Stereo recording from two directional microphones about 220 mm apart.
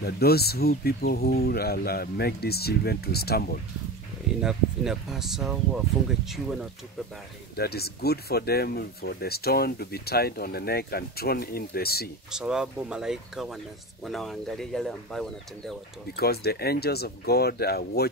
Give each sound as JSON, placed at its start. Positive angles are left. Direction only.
{"t": 0.0, "sound": "speech", "side_deg": 45}
{"t": 4.4, "sound": "speech", "side_deg": 0}
{"t": 7.5, "sound": "speech", "side_deg": 45}
{"t": 12.3, "sound": "speech", "side_deg": -5}
{"t": 16.2, "sound": "speech", "side_deg": 45}